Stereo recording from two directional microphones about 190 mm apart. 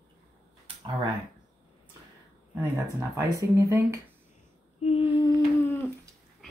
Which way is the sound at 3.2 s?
15° right (ahead or behind).